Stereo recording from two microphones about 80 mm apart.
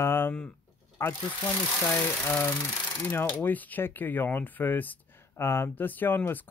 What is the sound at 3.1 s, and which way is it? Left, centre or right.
Speech, left.